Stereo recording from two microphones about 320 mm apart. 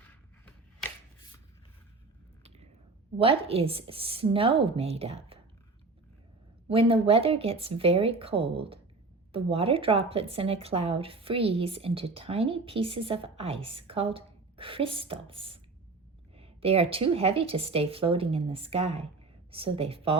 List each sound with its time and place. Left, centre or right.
0.0 s a sound: centre
3.2 s a woman's voice: centre
6.7 s a woman's voice: centre